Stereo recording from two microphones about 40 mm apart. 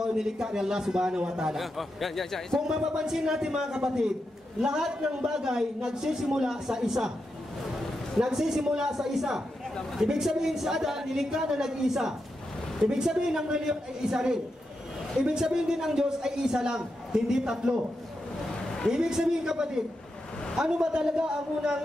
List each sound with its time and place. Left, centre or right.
0.0 s a man's voice: centre
1.6 s a man's voice: centre
2.6 s a man's voice: centre
8.2 s a man's voice: centre
18.9 s a man's voice: centre